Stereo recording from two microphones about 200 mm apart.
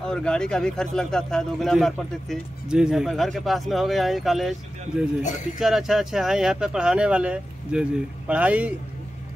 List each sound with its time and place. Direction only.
0.0 s a man's voice: 5° left (ahead or behind)